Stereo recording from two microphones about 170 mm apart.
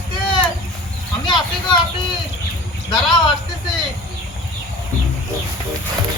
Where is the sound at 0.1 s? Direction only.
30° left (ahead or behind).